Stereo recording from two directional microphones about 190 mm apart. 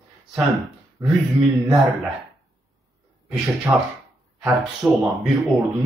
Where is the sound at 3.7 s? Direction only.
15° right (ahead or behind).